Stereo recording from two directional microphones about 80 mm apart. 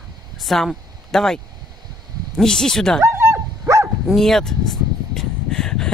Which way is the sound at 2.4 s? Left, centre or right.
Centre.